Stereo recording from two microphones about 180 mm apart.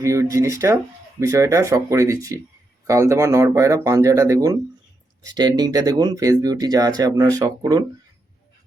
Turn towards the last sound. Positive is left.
turn(degrees=-20)  # may be behind; listen again after turning